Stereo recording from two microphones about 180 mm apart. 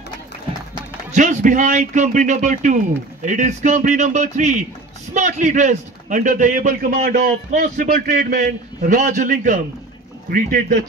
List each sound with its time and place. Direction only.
1.1 s a man's voice: 45° right (ahead or behind)